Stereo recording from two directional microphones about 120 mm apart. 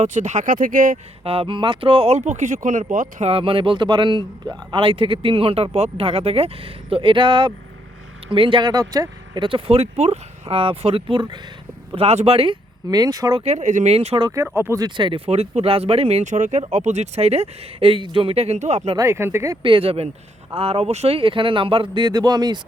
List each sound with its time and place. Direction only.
0.0 s speech: 75° right (ahead or behind)
1.2 s speech: 55° right (ahead or behind); by 3.3 s 85° right
3.3 s a man's voice: 50° right (ahead or behind)
11.9 s a man's voice: 55° right (ahead or behind)
12.9 s speech: 30° right (ahead or behind)
13.4 s speech: 75° right (ahead or behind); by 14.2 s 60° right (ahead or behind)
14.3 s speech: 20° right (ahead or behind)
14.8 s speech: 40° right (ahead or behind)
15.3 s speech: 60° right (ahead or behind)
18.9 s speech: 20° right (ahead or behind)
19.6 s a man's voice: 50° right (ahead or behind)